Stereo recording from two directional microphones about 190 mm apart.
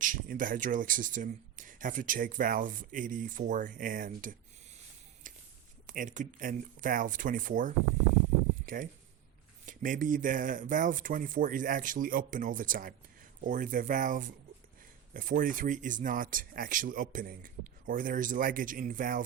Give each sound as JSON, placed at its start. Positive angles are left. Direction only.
{"t": 0.0, "sound": "speech", "side_deg": -45}
{"t": 5.2, "sound": "a sound", "side_deg": -45}
{"t": 5.8, "sound": "speech", "side_deg": -45}